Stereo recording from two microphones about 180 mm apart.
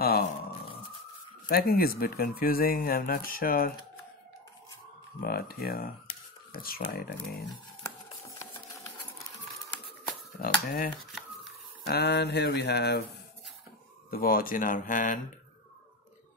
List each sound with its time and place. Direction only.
1.5 s speech: 55° left (ahead or behind)
5.2 s speech: 55° left (ahead or behind)
10.4 s speech: 50° left (ahead or behind)
11.8 s speech: 65° left (ahead or behind)
14.1 s speech: 50° left (ahead or behind)